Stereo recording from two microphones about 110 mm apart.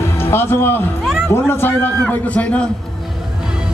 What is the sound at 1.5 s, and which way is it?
A man's voice, 20° left (ahead or behind).